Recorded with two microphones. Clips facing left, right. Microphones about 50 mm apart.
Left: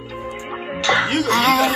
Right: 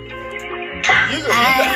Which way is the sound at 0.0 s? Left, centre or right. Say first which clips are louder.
Right 2 dB; right.